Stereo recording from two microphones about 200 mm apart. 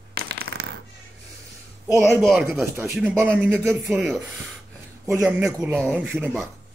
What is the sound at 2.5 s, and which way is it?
A man's voice, 10° right (ahead or behind).